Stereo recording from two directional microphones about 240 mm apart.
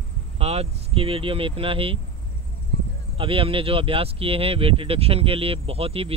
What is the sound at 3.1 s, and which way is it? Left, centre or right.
Speech, right.